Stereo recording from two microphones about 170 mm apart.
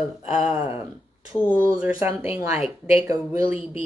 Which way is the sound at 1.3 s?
10° left (ahead or behind).